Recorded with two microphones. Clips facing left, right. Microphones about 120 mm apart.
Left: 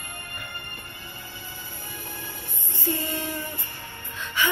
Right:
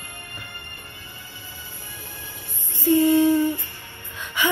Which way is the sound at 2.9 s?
20° right (ahead or behind).